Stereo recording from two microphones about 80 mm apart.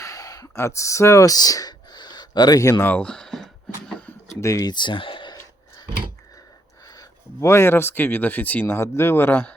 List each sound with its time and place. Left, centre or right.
0.0 s a sound: left
0.5 s speech: left
2.6 s speech: left
2.8 s a sound: centre
4.4 s speech: left
4.6 s speech: left
7.4 s speech: left
8.6 s speech: left